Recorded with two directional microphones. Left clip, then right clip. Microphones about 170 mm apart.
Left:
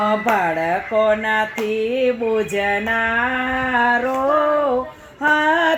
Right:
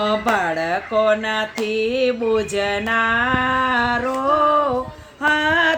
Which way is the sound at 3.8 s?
15° left (ahead or behind).